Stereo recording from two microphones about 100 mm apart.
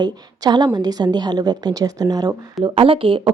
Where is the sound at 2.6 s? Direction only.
65° right (ahead or behind).